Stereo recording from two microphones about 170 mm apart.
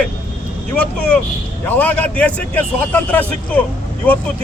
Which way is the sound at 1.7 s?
10° left (ahead or behind).